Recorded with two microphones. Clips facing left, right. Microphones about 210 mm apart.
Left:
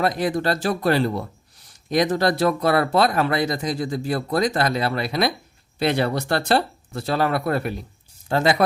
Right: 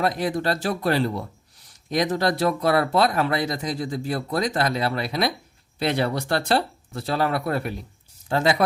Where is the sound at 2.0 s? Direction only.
75° left (ahead or behind).